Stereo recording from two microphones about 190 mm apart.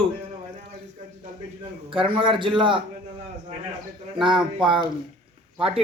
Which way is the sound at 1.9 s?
25° right (ahead or behind).